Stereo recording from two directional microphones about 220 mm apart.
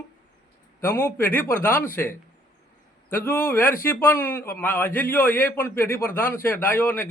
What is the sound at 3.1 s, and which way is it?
A man's voice, 10° left (ahead or behind).